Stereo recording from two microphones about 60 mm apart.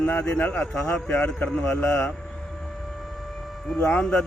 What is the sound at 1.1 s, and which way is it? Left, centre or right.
A man's voice, left.